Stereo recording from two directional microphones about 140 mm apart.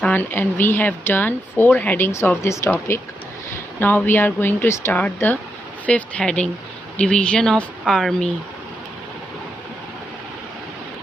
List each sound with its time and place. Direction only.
0.0 s speech: 15° left (ahead or behind)